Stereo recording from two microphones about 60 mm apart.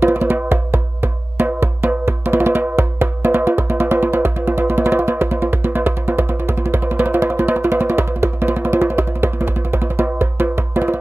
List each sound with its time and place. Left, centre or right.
0.0 s music: right